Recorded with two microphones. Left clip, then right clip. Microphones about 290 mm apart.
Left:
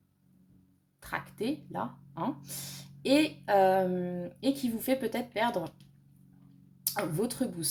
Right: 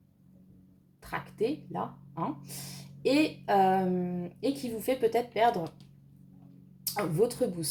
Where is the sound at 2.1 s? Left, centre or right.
Left.